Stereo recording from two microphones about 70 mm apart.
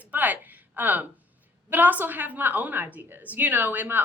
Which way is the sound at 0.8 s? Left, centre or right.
Right.